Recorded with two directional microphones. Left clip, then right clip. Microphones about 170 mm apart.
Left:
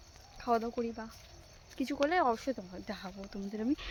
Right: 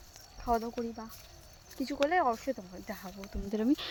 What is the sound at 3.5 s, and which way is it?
Speech, 30° right (ahead or behind).